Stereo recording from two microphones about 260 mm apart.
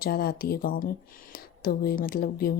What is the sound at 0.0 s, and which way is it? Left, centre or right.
Speech, left.